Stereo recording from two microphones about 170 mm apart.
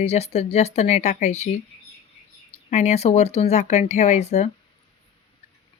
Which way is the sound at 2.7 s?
40° left (ahead or behind).